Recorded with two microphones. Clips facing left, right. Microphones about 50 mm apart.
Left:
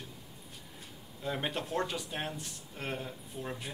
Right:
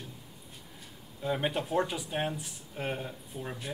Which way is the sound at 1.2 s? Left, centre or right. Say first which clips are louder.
Right 4 dB; centre.